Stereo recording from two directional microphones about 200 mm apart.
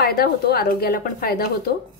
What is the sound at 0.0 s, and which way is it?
A woman's voice, 50° left (ahead or behind).